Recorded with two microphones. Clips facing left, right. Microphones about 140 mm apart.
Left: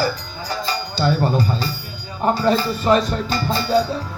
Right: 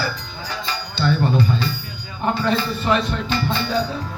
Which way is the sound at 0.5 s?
40° left (ahead or behind).